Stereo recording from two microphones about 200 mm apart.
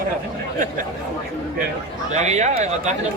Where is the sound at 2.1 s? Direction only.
35° right (ahead or behind).